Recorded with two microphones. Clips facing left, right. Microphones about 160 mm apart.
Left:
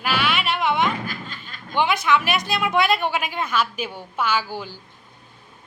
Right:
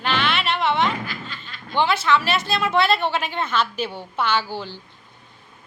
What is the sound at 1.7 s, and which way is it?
A woman's voice, 15° left (ahead or behind).